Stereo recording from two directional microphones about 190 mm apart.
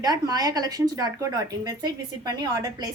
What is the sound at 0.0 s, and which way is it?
Speech, 20° right (ahead or behind).